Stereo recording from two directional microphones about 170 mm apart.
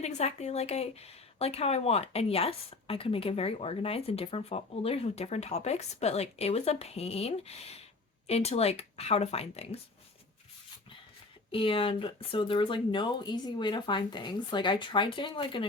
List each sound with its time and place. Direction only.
0.0 s speech: 40° left (ahead or behind)
11.5 s speech: 30° left (ahead or behind)